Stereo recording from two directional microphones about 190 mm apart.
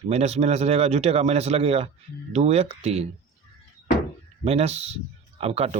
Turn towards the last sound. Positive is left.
turn(degrees=-35)  # may be behind; listen again after turning